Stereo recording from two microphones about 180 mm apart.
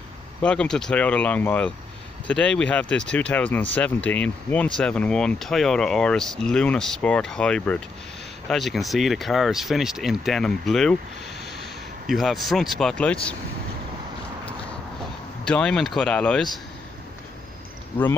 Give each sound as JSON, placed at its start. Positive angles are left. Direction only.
{"t": 0.4, "sound": "speech", "side_deg": 5}
{"t": 12.1, "sound": "speech", "side_deg": 0}
{"t": 15.4, "sound": "speech", "side_deg": 5}